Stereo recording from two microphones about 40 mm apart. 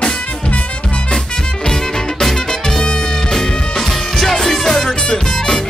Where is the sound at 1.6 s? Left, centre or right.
Centre.